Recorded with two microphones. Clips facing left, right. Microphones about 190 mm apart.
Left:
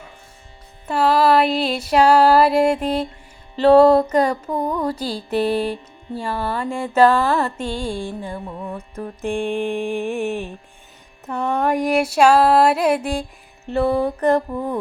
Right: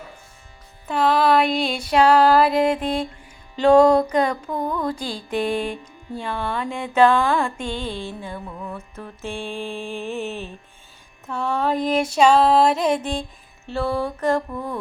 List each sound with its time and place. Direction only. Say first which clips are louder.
0.9 s music: left 2 dB; 10° left (ahead or behind)
3.6 s mantra: left 2 dB; 5° left (ahead or behind)
5.7 s music: left 2 dB; 5° left (ahead or behind)
6.7 s mantra: left 2 dB; 10° left (ahead or behind)